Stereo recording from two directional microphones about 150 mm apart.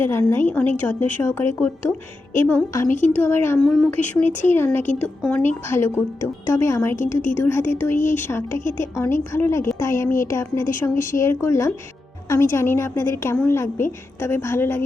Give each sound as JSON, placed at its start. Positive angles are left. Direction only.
{"t": 0.0, "sound": "a woman's voice", "side_deg": 15}
{"t": 6.9, "sound": "a woman's voice", "side_deg": 60}
{"t": 7.3, "sound": "a woman's voice", "side_deg": 15}